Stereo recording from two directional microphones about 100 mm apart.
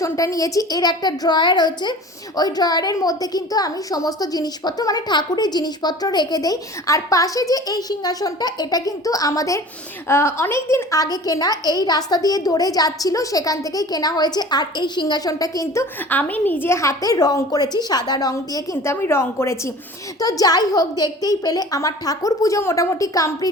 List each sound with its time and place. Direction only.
0.0 s a woman's voice: 35° left (ahead or behind)
16.0 s a woman's voice: 15° left (ahead or behind)
20.1 s a woman's voice: 35° left (ahead or behind)